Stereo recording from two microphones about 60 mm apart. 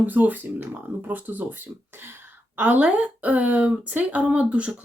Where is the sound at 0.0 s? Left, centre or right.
Right.